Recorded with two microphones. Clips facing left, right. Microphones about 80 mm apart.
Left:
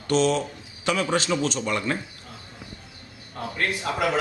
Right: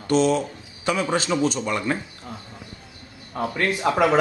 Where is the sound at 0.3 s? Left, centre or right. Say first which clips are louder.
Right 2 dB; centre.